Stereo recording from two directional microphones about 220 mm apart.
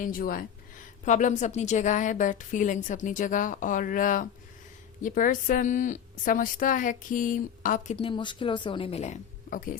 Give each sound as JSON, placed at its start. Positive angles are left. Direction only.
{"t": 0.0, "sound": "a woman's voice", "side_deg": 40}
{"t": 7.9, "sound": "speech", "side_deg": 25}